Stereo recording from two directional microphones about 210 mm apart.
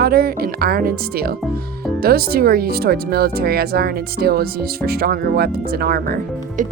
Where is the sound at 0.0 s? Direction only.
45° right (ahead or behind).